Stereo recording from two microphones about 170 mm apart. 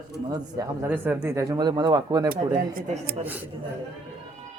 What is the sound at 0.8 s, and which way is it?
Speech, 10° right (ahead or behind).